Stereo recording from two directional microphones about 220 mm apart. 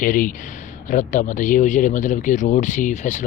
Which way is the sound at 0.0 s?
35° left (ahead or behind).